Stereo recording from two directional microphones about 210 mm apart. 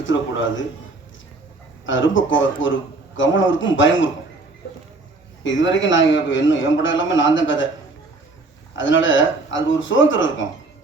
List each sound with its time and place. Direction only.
1.9 s a man's voice: 65° left (ahead or behind)
5.4 s a man's voice: 65° left (ahead or behind)
8.8 s a man's voice: 65° left (ahead or behind)